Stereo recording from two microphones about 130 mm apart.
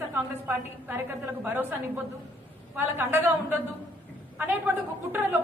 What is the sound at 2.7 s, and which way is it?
A woman's voice, 15° right (ahead or behind).